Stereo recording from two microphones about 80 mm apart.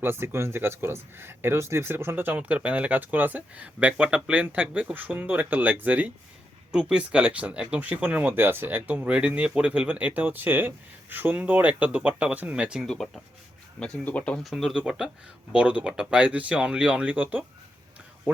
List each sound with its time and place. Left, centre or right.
0.0 s speech: right
12.8 s speech: centre
13.7 s speech: centre
14.4 s speech: centre